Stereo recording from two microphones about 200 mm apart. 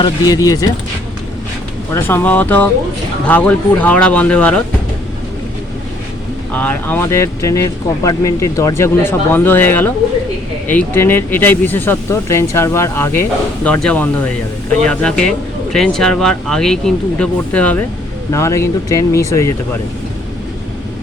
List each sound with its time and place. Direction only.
0.0 s speech: 15° left (ahead or behind)
1.9 s speech: 10° left (ahead or behind)
6.5 s speech: 10° left (ahead or behind)